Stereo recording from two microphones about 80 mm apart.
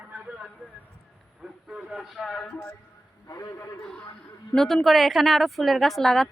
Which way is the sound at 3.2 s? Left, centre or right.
Left.